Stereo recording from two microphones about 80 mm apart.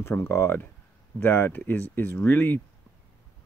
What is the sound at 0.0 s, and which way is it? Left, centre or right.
Speech, left.